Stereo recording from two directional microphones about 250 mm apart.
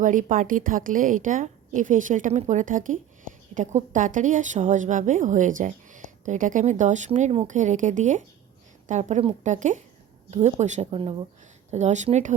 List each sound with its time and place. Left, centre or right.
0.0 s a woman's voice: right